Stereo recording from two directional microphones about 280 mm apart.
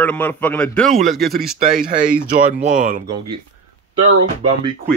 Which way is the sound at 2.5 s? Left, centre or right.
Right.